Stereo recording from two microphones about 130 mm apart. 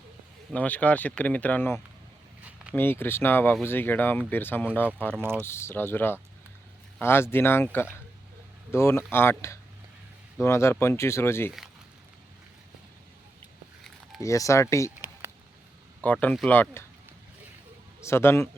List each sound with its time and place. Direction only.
0.5 s speech: 10° left (ahead or behind)
14.2 s speech: 25° left (ahead or behind)
15.2 s a sound: 20° right (ahead or behind)
16.0 s speech: 10° left (ahead or behind)
18.0 s speech: 20° left (ahead or behind)